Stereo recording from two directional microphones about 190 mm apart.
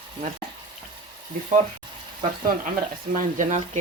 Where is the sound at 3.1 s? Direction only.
40° right (ahead or behind).